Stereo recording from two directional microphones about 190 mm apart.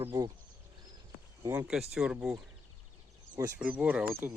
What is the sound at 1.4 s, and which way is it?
Speech, 15° right (ahead or behind).